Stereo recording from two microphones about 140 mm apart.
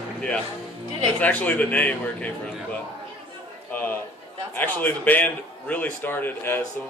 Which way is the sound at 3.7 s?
10° left (ahead or behind).